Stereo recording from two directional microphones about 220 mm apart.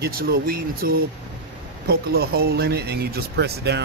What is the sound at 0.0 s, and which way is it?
Speech, 45° right (ahead or behind).